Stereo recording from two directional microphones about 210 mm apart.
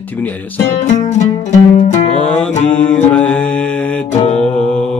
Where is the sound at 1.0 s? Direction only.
35° left (ahead or behind).